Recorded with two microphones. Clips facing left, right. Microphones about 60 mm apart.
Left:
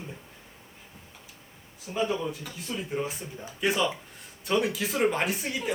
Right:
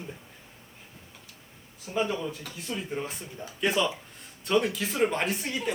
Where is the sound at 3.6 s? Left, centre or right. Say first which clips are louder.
Even; centre.